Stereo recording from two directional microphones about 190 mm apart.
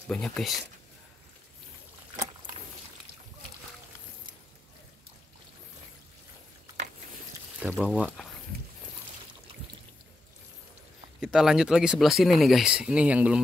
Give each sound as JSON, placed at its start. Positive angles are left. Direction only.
{"t": 0.1, "sound": "speech", "side_deg": 0}
{"t": 7.6, "sound": "speech", "side_deg": 0}
{"t": 11.1, "sound": "speech", "side_deg": -5}